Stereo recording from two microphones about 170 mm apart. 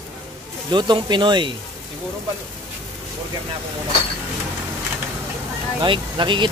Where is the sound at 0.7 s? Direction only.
25° right (ahead or behind).